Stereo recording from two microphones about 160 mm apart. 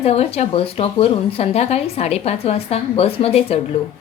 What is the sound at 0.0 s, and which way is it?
Speech, 40° left (ahead or behind).